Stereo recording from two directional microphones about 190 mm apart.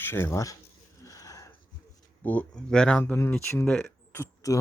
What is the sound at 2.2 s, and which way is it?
Speech, 5° left (ahead or behind).